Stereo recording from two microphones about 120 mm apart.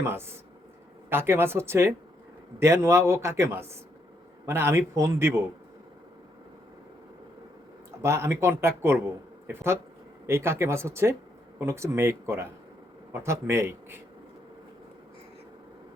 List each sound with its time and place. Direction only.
0.0 s a man's voice: 20° right (ahead or behind)
8.0 s a man's voice: 20° right (ahead or behind)
10.2 s a man's voice: 20° right (ahead or behind)